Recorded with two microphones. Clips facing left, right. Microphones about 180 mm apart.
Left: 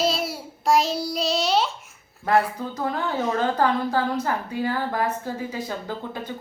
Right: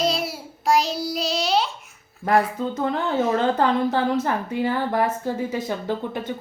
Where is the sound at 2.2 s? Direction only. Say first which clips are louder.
Right 1 dB; 20° right (ahead or behind).